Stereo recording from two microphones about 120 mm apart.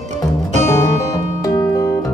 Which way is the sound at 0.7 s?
25° left (ahead or behind).